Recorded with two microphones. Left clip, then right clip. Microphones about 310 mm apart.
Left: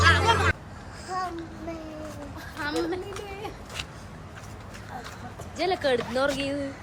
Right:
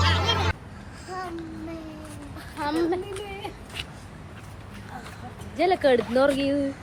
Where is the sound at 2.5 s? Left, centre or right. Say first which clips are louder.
Right 4 dB; centre.